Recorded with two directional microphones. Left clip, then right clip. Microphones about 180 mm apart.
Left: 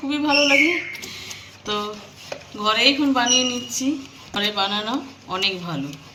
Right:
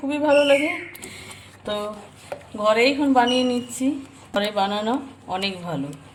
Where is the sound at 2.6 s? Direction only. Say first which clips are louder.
Even; 65° right (ahead or behind).